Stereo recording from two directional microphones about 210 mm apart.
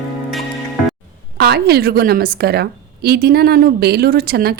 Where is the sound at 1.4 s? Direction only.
50° right (ahead or behind).